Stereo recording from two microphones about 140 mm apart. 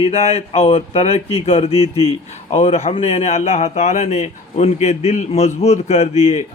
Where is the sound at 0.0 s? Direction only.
45° left (ahead or behind).